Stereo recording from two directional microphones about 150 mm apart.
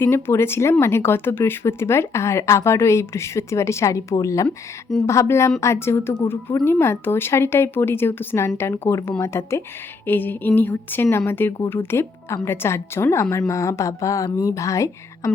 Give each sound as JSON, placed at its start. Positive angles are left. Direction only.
{"t": 0.0, "sound": "speech", "side_deg": 15}
{"t": 4.4, "sound": "speech", "side_deg": 5}
{"t": 5.0, "sound": "speech", "side_deg": 20}